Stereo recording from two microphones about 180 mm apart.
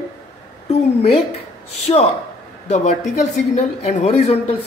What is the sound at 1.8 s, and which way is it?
A woman's voice, 35° left (ahead or behind).